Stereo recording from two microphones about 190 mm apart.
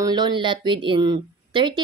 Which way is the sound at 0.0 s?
20° right (ahead or behind).